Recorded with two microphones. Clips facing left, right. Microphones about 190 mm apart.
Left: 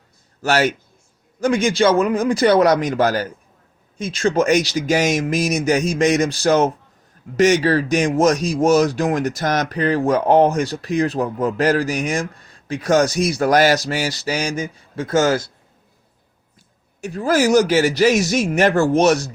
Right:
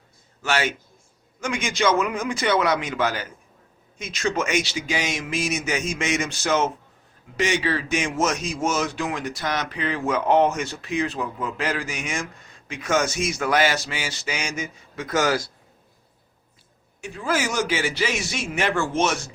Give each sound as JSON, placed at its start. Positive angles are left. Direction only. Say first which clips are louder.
{"t": 0.4, "sound": "speech", "louder": "left 7 dB", "side_deg": 40}
{"t": 17.0, "sound": "speech", "louder": "left 8 dB", "side_deg": 40}